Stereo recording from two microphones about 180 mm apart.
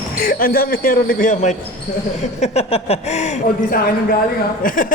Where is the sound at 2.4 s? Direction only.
35° left (ahead or behind).